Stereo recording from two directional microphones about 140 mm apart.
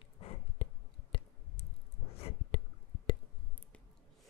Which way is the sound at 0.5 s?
40° left (ahead or behind).